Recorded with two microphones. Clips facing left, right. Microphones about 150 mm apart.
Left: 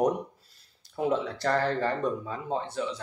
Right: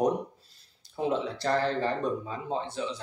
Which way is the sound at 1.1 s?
20° right (ahead or behind).